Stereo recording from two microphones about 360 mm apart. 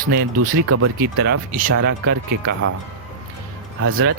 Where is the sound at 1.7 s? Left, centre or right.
Right.